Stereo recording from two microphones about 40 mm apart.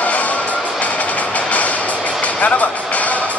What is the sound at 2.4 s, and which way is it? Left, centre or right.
Music, left.